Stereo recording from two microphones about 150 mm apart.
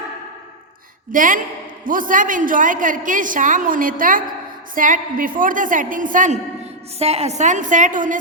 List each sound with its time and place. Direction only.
1.1 s a woman's voice: 65° right (ahead or behind)
7.0 s a woman's voice: 45° right (ahead or behind); by 8.2 s 60° right (ahead or behind)